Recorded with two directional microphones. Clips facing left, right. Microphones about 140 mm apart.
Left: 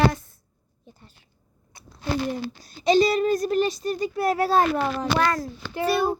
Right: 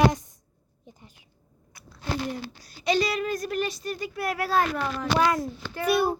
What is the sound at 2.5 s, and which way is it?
Speech, 25° left (ahead or behind).